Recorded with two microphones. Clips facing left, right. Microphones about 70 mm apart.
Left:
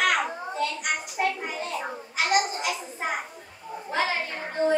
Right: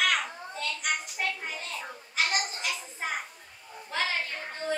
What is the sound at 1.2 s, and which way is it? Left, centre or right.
Child singing, left.